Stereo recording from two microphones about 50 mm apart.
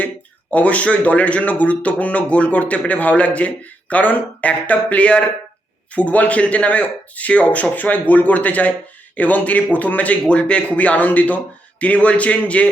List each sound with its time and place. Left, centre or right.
0.5 s speech: left